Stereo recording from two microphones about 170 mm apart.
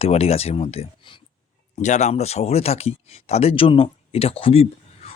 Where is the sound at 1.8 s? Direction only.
45° left (ahead or behind).